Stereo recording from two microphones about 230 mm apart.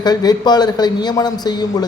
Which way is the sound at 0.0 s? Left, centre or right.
Centre.